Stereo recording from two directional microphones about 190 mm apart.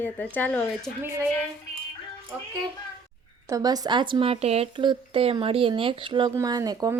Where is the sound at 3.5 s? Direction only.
20° right (ahead or behind).